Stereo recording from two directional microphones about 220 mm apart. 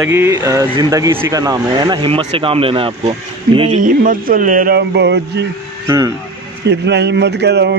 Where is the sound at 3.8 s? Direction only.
40° right (ahead or behind).